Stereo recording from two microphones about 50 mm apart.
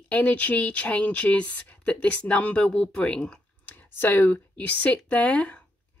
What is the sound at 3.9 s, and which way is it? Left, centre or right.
Speech, left.